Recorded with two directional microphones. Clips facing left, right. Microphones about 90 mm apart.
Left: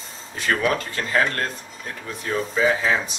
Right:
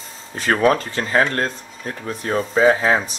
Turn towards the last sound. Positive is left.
turn(degrees=-40)  # may be behind; listen again after turning